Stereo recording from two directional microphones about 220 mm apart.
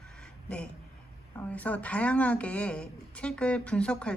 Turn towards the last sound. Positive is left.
turn(degrees=5)  # may be behind; listen again after turning